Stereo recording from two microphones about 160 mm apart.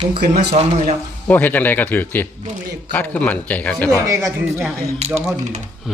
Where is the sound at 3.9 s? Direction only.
20° right (ahead or behind).